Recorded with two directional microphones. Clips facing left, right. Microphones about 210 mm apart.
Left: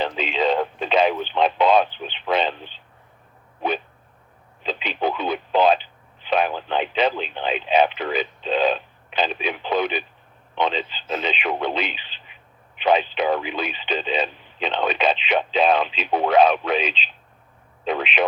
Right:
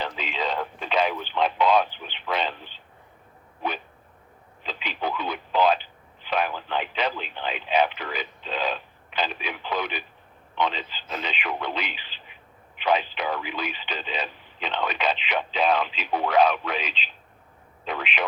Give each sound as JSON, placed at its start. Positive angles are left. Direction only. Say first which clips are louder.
{"t": 0.0, "sound": "radio", "louder": "left 7 dB", "side_deg": 25}
{"t": 4.6, "sound": "telephone", "louder": "left 6 dB", "side_deg": 25}
{"t": 10.5, "sound": "radio", "louder": "left 4 dB", "side_deg": 25}
{"t": 17.8, "sound": "a sound", "louder": "left 7 dB", "side_deg": 25}